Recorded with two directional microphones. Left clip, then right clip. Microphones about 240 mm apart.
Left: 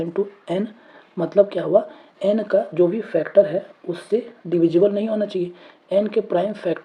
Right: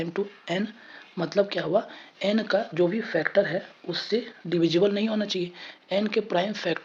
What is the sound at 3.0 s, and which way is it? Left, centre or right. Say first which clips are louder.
Speech: left 4 dB; right.